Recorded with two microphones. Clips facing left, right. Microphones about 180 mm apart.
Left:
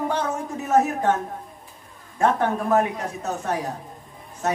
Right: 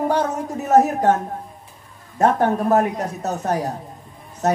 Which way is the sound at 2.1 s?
40° right (ahead or behind).